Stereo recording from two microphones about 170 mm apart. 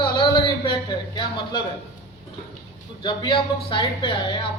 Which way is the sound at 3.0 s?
30° left (ahead or behind).